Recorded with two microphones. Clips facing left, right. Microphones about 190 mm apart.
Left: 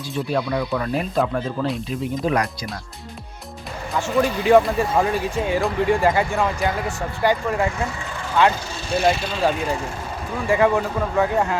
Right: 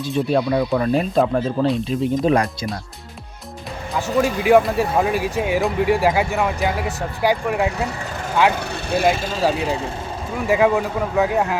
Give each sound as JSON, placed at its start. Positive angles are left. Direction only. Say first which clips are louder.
{"t": 0.1, "sound": "speech", "louder": "right 4 dB", "side_deg": -25}
{"t": 4.2, "sound": "speech", "louder": "right 1 dB", "side_deg": -10}
{"t": 8.5, "sound": "speech", "louder": "right 2 dB", "side_deg": -60}
{"t": 10.5, "sound": "speech", "louder": "right 1 dB", "side_deg": -10}